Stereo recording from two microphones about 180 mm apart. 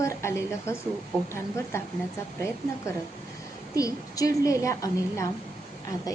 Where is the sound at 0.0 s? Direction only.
15° left (ahead or behind).